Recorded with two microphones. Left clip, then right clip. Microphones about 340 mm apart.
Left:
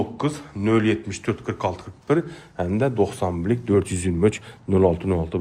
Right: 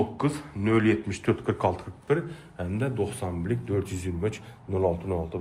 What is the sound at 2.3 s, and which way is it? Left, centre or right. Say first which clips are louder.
A man's voice: left 9 dB; centre.